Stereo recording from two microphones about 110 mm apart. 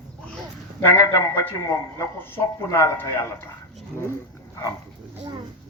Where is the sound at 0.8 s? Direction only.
25° left (ahead or behind).